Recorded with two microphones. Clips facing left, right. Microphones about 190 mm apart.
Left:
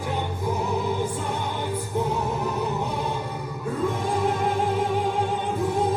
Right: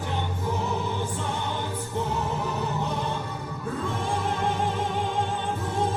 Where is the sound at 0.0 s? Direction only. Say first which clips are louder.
Left 2 dB; 10° left (ahead or behind).